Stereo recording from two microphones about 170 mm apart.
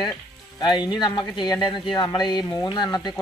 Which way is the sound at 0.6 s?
25° left (ahead or behind).